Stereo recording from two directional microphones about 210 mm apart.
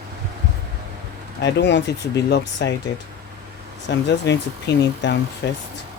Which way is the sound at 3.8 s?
55° left (ahead or behind).